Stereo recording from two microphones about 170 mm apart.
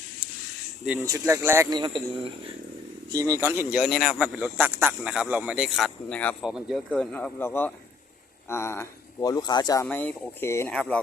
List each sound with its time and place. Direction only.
1.0 s speech: 20° right (ahead or behind); by 9.8 s 25° left (ahead or behind)
9.8 s speech: 10° left (ahead or behind)